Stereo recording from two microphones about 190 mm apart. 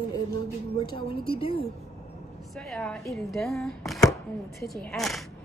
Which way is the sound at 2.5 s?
Centre (ahead or behind).